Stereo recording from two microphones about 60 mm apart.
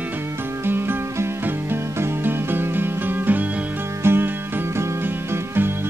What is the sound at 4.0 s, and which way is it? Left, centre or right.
Music, right.